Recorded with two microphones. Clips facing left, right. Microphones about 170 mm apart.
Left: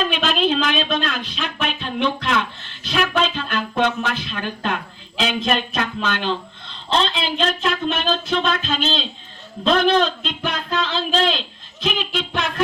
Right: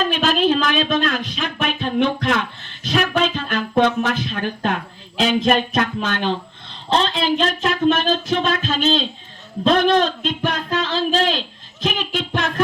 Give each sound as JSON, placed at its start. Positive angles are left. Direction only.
{"t": 0.0, "sound": "a man's voice", "side_deg": -45}